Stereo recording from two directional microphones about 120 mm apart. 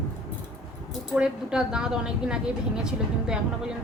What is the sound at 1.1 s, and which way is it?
A woman's voice, 5° right (ahead or behind).